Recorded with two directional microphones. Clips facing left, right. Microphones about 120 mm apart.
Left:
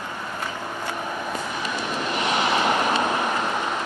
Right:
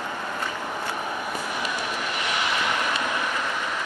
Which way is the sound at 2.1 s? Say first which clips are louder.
Left 7 dB; 25° left (ahead or behind).